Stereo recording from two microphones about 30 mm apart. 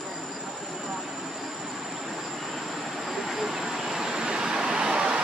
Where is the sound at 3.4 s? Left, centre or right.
Centre; by 5.2 s right.